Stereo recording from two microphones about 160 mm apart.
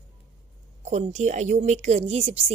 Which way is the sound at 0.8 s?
50° right (ahead or behind).